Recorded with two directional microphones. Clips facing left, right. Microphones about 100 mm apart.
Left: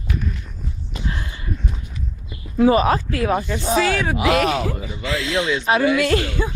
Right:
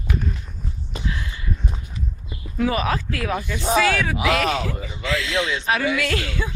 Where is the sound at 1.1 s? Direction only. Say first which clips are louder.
Left 1 dB; 35° left (ahead or behind).